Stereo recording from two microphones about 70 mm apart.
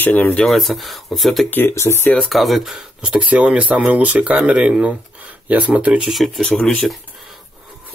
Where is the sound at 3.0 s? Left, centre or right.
Centre.